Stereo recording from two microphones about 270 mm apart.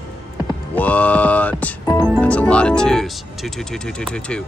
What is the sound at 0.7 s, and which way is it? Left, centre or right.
Speech, centre.